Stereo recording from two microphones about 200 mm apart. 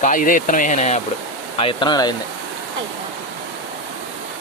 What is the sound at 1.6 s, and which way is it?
Speech, 25° left (ahead or behind).